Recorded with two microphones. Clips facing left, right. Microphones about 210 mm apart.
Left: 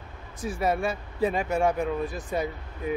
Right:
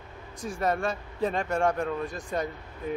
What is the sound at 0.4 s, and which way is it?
Speech, 5° left (ahead or behind).